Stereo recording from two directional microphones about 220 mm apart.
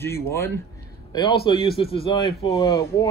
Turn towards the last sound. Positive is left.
turn(degrees=15)  # may be behind; listen again after turning